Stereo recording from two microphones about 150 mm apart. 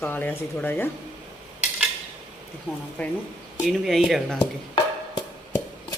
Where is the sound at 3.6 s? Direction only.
Centre (ahead or behind).